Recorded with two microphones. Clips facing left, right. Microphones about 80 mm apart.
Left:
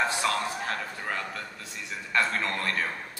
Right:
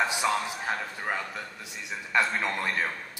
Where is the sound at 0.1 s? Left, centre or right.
Centre.